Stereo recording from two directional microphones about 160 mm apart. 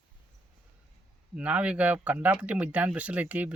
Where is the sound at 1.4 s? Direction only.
10° right (ahead or behind).